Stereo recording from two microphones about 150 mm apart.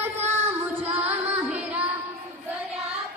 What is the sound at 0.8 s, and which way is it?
Music, 45° right (ahead or behind).